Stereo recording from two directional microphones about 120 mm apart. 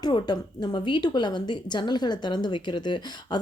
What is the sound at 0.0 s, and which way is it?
A woman's voice, 40° left (ahead or behind).